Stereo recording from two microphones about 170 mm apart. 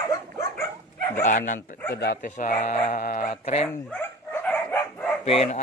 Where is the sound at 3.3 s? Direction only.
40° left (ahead or behind).